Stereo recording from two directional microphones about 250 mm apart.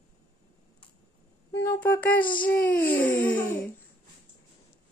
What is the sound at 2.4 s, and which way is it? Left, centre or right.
Speech, centre.